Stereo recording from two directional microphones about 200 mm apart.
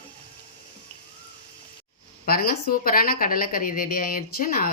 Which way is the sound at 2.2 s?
50° left (ahead or behind).